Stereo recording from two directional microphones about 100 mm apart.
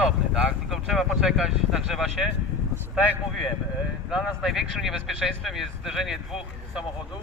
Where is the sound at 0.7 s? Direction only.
Centre (ahead or behind).